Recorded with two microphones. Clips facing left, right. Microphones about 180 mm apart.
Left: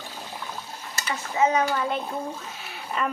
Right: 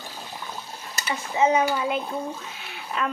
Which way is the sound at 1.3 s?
20° right (ahead or behind).